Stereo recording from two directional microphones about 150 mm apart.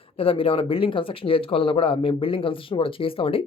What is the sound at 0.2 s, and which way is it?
Speech, 35° left (ahead or behind).